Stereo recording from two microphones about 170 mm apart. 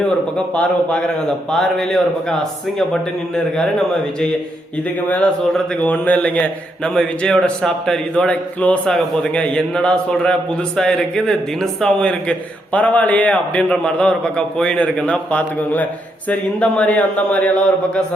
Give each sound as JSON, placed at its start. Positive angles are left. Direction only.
{"t": 0.3, "sound": "a man's voice", "side_deg": 5}